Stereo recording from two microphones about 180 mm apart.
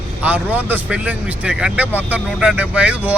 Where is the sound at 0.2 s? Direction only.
10° right (ahead or behind).